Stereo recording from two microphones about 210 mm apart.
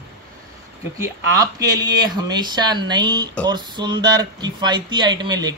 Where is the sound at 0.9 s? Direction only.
15° right (ahead or behind).